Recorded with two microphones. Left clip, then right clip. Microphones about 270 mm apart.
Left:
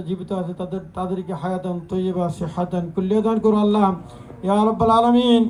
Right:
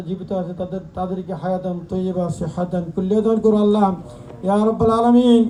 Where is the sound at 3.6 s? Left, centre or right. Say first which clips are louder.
Right 2 dB; centre.